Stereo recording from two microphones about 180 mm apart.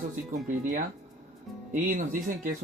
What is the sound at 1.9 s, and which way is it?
Speech, 45° right (ahead or behind).